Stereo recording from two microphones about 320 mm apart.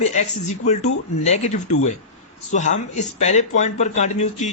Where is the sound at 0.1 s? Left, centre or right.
Left.